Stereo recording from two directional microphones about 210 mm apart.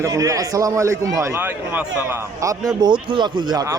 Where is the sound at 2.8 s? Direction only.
20° right (ahead or behind).